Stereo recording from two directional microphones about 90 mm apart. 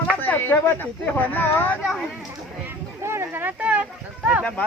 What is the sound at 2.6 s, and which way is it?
Speech, 25° right (ahead or behind).